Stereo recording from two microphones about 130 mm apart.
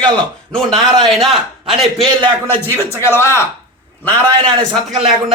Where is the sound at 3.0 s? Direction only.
20° left (ahead or behind).